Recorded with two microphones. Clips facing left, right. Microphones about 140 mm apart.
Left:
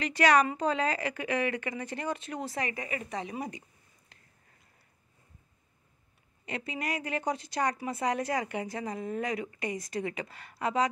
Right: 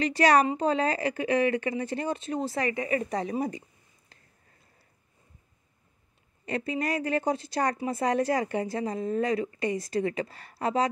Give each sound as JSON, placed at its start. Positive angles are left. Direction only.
{"t": 0.0, "sound": "a woman's voice", "side_deg": -35}
{"t": 4.1, "sound": "a sound", "side_deg": -30}
{"t": 6.4, "sound": "a woman's voice", "side_deg": -35}